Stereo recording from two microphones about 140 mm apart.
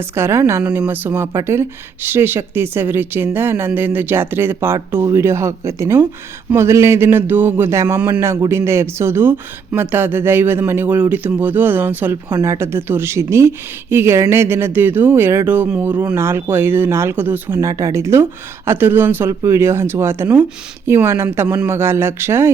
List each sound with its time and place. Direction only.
0.1 s speech: 20° right (ahead or behind)